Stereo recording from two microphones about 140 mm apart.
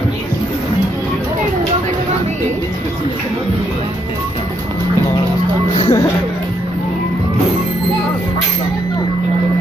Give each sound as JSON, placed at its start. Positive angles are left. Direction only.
{"t": 5.8, "sound": "music", "side_deg": 30}